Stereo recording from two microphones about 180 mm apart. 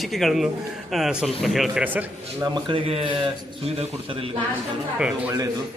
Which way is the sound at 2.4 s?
30° right (ahead or behind).